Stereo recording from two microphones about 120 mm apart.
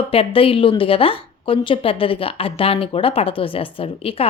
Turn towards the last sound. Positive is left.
turn(degrees=50)  # may be behind; listen again after turning